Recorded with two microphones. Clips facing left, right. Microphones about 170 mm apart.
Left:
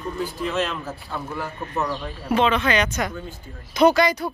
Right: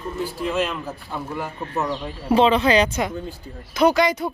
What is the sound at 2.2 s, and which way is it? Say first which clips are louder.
Speech: right 4 dB; 30° right (ahead or behind).